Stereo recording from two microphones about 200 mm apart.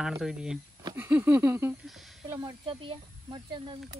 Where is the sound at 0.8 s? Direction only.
20° right (ahead or behind).